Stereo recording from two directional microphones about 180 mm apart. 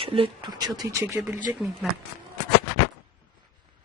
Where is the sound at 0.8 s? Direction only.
15° right (ahead or behind).